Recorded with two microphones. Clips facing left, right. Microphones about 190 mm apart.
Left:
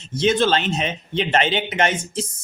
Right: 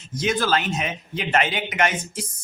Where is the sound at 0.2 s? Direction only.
25° left (ahead or behind).